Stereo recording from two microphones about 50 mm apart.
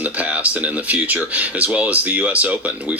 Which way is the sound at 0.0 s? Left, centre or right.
Right.